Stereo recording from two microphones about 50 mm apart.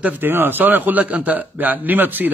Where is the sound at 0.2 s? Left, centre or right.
Right.